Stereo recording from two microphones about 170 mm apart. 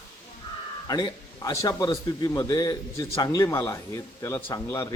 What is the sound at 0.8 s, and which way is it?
A man's voice, 20° left (ahead or behind).